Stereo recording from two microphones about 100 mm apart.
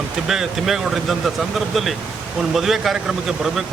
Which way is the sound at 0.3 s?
5° right (ahead or behind).